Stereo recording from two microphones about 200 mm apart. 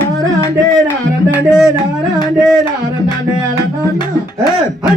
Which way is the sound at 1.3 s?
5° right (ahead or behind).